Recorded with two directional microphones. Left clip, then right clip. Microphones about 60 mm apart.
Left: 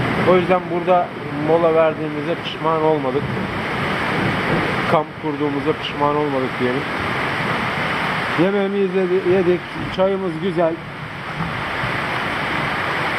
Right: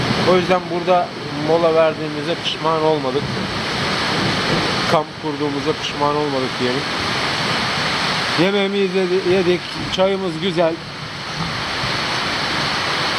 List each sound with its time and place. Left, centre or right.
0.0 s speech: centre
4.0 s thunder: centre
4.7 s air conditioning: right
5.6 s speech: centre
8.4 s speech: right